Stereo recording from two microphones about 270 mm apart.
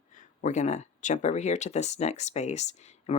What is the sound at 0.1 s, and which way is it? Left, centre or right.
Speech, left.